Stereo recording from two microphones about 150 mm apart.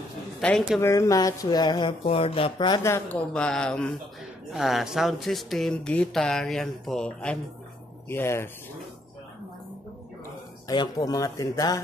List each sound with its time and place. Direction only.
0.4 s speech: 5° left (ahead or behind)
0.7 s speech: 20° left (ahead or behind)
2.8 s speech: 20° left (ahead or behind)
3.3 s speech: 5° left (ahead or behind)
10.7 s speech: 25° left (ahead or behind)